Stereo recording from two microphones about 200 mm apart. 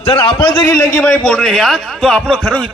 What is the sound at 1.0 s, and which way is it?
A man's voice, 5° left (ahead or behind).